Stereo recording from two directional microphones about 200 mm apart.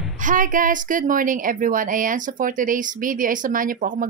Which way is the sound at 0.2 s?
40° right (ahead or behind).